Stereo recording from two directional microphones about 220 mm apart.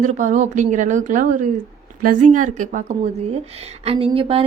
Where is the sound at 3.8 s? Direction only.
25° right (ahead or behind).